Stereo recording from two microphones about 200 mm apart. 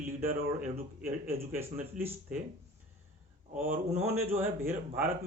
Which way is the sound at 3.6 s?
40° right (ahead or behind).